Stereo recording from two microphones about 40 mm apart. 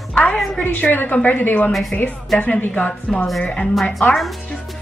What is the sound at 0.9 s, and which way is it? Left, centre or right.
Speech, left.